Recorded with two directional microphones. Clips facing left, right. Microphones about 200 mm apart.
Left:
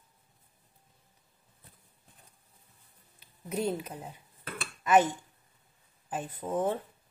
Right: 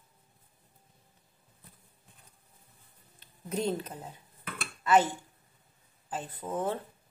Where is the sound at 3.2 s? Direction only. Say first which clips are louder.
Even; 5° left (ahead or behind).